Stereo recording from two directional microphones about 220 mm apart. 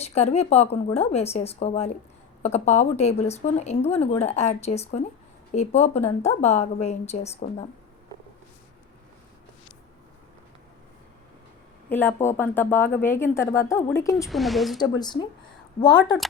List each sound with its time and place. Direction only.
0.0 s a woman's voice: 30° left (ahead or behind)
11.9 s speech: 10° left (ahead or behind)
14.3 s speech: centre (ahead or behind)
14.8 s speech: 20° left (ahead or behind)